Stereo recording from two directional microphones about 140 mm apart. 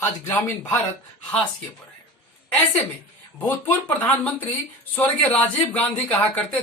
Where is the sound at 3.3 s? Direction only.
15° left (ahead or behind).